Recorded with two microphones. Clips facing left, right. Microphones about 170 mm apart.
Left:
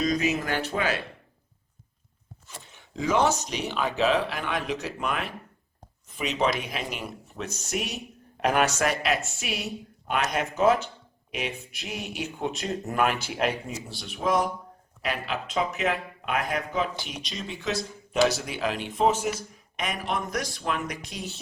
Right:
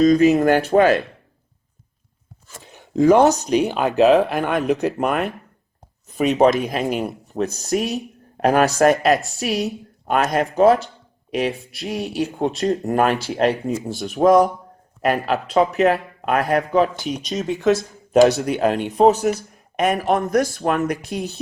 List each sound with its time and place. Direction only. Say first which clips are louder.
0.0 s speech: right 12 dB; 40° right (ahead or behind)
0.3 s a man's voice: right 14 dB; 50° right (ahead or behind)
2.9 s a man's voice: right 10 dB; 45° right (ahead or behind)
10.6 s speech: right 7 dB; 35° right (ahead or behind)
13.7 s a man's voice: right 14 dB; 50° right (ahead or behind)